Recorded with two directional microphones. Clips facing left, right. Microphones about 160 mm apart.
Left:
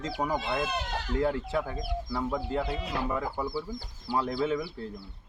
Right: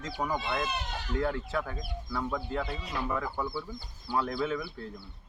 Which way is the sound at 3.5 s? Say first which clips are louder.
Left 3 dB; 35° left (ahead or behind).